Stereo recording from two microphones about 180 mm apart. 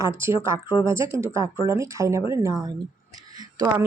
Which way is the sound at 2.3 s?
20° right (ahead or behind).